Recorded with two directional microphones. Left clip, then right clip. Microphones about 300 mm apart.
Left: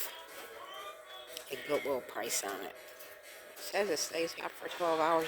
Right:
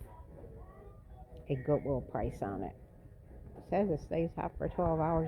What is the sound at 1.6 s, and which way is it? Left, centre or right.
Speech, left.